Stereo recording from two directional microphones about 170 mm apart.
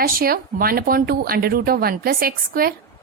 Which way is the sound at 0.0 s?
60° right (ahead or behind).